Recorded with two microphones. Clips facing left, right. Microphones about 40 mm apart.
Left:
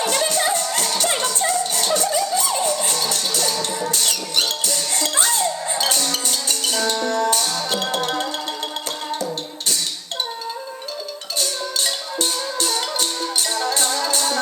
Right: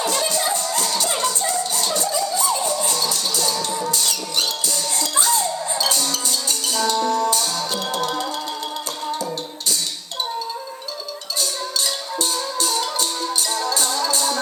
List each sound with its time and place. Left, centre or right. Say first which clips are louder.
0.0 s music: left 2 dB; left
11.3 s music: left 1 dB; left